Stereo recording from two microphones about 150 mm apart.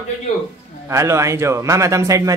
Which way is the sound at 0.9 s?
20° right (ahead or behind).